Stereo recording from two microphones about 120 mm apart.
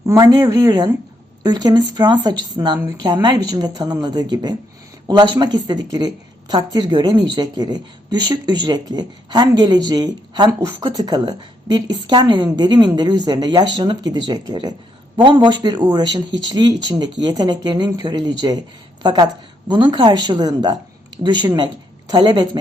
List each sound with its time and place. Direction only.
0.0 s a woman's voice: 30° right (ahead or behind)